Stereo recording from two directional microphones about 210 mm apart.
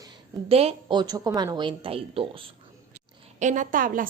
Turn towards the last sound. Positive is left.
turn(degrees=-40)  # may be behind; listen again after turning